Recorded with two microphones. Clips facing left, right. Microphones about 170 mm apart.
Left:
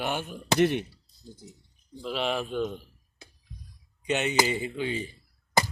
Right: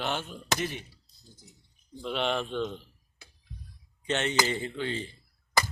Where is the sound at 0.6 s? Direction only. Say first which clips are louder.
Left 11 dB; 65° left (ahead or behind).